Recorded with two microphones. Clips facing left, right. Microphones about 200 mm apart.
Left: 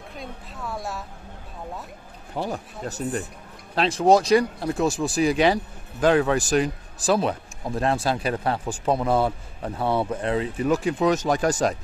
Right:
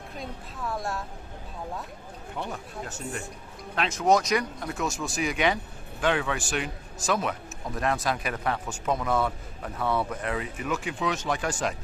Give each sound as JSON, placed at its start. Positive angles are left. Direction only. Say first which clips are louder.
{"t": 0.1, "sound": "a woman's voice", "louder": "even", "side_deg": 0}
{"t": 2.3, "sound": "speech", "louder": "left 6 dB", "side_deg": 35}